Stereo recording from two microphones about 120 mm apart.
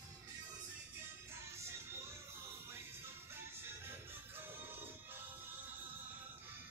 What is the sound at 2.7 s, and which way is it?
Music, 20° right (ahead or behind).